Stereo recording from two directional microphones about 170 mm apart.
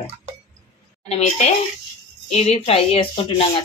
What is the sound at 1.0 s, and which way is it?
A woman's voice, 40° left (ahead or behind).